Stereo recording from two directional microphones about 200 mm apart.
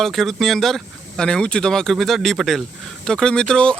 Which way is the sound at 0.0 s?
Centre (ahead or behind).